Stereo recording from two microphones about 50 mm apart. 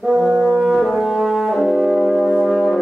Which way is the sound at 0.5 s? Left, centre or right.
Centre.